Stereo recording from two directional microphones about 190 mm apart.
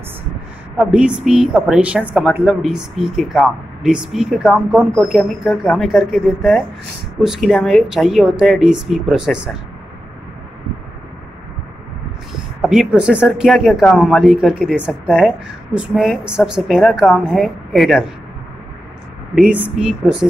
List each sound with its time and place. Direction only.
0.9 s speech: 5° right (ahead or behind)
12.3 s speech: 5° right (ahead or behind)
19.3 s speech: 5° right (ahead or behind)